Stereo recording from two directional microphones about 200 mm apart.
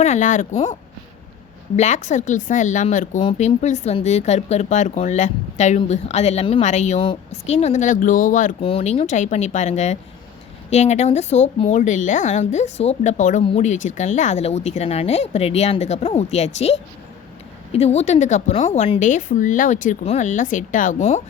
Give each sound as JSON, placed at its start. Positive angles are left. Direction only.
{"t": 0.0, "sound": "speech", "side_deg": 35}
{"t": 1.7, "sound": "speech", "side_deg": 35}